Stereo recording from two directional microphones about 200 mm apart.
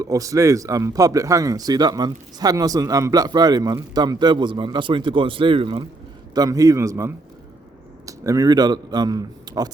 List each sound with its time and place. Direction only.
0.0 s a man's voice: 15° right (ahead or behind)